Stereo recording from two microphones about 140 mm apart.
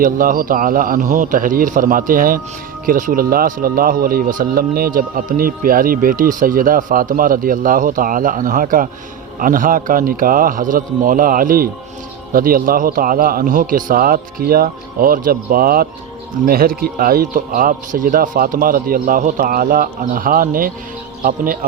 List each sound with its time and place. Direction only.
0.0 s a man's voice: 80° right